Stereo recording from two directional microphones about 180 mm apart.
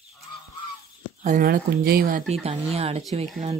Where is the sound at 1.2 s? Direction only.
50° right (ahead or behind).